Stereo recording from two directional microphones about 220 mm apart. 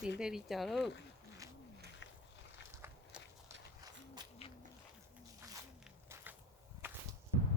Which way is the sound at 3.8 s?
20° right (ahead or behind).